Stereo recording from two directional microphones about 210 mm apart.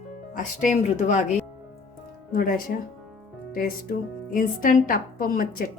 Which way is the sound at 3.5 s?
40° left (ahead or behind).